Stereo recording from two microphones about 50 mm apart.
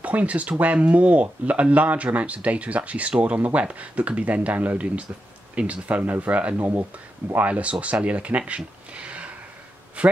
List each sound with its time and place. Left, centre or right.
0.0 s speech: right
6.6 s speech: right
7.3 s speech: right